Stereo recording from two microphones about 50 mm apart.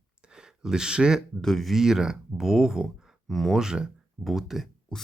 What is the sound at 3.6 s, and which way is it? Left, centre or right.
Speech, centre.